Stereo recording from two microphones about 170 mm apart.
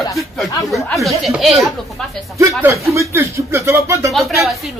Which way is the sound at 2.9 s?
15° right (ahead or behind).